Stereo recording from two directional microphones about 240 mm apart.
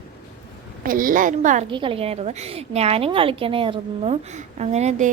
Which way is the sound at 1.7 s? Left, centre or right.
Right.